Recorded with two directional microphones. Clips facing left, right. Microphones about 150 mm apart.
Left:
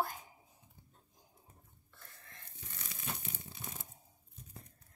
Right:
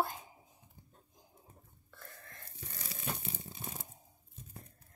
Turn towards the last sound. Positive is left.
turn(degrees=-30)  # may be behind; listen again after turning